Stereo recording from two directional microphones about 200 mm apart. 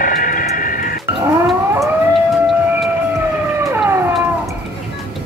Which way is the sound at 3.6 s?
15° right (ahead or behind).